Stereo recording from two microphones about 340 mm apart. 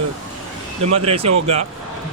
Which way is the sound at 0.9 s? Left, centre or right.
Centre.